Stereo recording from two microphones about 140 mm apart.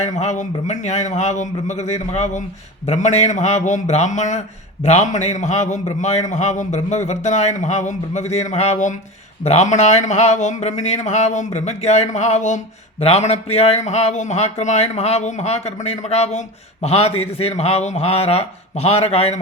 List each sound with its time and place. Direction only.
0.0 s a man's voice: 55° left (ahead or behind)